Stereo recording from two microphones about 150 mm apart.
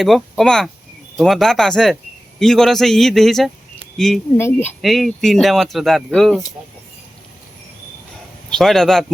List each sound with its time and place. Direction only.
0.0 s speech: centre (ahead or behind)
4.4 s speech: 15° left (ahead or behind)
4.8 s speech: centre (ahead or behind)
8.4 s speech: 5° left (ahead or behind)